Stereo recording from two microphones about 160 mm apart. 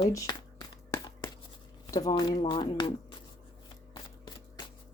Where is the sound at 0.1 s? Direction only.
20° left (ahead or behind).